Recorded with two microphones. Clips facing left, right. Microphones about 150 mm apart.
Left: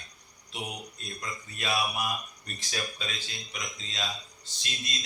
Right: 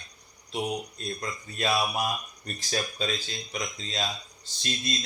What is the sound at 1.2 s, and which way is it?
Speech, 40° right (ahead or behind).